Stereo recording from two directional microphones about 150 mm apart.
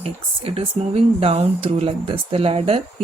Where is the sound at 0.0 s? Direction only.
40° right (ahead or behind).